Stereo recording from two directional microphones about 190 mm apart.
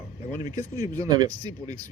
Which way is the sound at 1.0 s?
20° right (ahead or behind).